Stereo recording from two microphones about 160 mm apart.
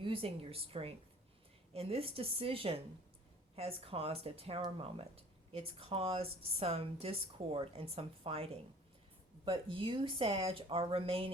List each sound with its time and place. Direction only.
0.0 s speech: 35° right (ahead or behind)